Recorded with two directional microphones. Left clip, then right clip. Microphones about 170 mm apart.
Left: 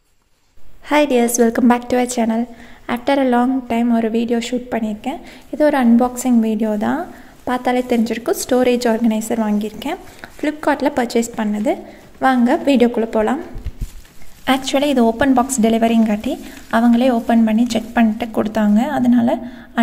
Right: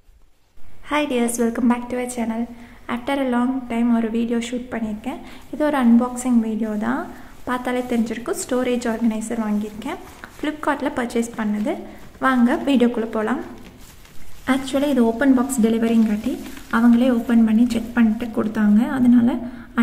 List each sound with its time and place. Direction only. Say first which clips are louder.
0.8 s a woman's voice: left 7 dB; 30° left (ahead or behind)
10.4 s a woman's voice: left 5 dB; 20° left (ahead or behind)
14.4 s a woman's voice: left 5 dB; 40° left (ahead or behind)